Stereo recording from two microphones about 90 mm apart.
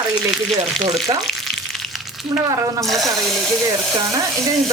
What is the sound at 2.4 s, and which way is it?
Speech, 40° right (ahead or behind).